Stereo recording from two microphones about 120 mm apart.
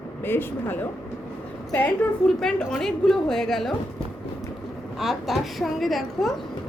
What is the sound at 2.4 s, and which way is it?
A woman's voice, 5° left (ahead or behind).